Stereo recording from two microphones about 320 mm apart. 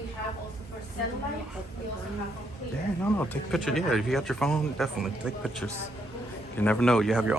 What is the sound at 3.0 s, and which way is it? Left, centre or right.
Speech, centre.